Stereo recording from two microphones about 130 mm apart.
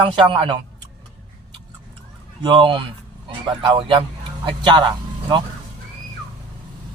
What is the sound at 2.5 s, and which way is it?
A man's voice, 40° right (ahead or behind).